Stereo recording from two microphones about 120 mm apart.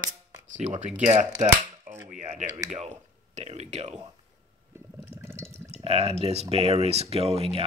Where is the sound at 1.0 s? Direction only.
75° right (ahead or behind).